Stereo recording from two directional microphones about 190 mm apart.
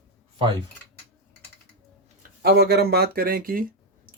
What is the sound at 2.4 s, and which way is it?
Speech, 55° right (ahead or behind).